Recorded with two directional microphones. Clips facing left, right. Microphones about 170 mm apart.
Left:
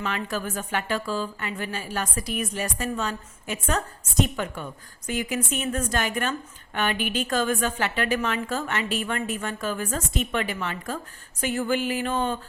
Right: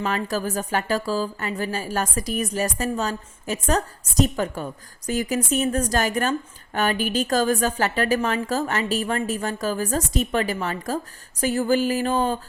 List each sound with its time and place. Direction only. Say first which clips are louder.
0.0 s speech: right 4 dB; 40° right (ahead or behind)